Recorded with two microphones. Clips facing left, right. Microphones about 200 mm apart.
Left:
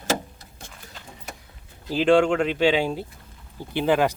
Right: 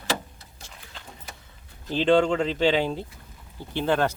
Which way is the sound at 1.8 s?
10° left (ahead or behind).